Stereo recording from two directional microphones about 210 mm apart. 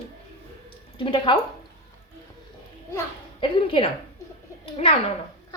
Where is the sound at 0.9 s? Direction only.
25° left (ahead or behind).